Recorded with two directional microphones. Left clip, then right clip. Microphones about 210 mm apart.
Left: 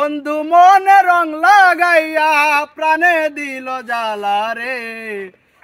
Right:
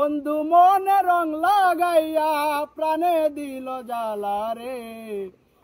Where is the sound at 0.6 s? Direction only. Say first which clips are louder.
Left 9 dB; 40° left (ahead or behind).